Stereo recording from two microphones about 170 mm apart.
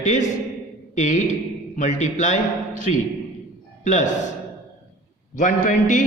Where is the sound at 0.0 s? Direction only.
45° left (ahead or behind).